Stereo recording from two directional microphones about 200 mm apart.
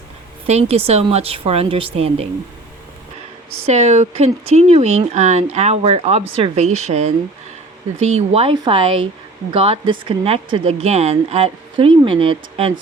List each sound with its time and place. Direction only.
0.4 s a woman's voice: 30° right (ahead or behind)
3.7 s a woman's voice: 35° right (ahead or behind)
8.1 s speech: 30° right (ahead or behind)